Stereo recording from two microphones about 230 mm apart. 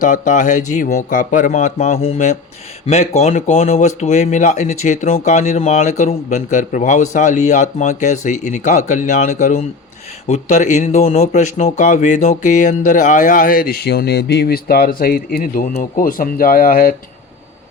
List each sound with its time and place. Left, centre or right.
0.0 s speech: left